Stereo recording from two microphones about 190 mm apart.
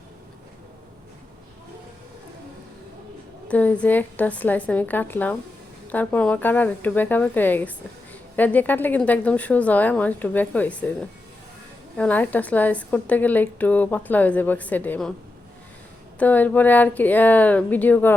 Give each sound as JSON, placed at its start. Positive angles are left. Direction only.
{"t": 3.5, "sound": "a woman's voice", "side_deg": 5}
{"t": 11.9, "sound": "a woman's voice", "side_deg": 10}
{"t": 16.1, "sound": "a woman's voice", "side_deg": 10}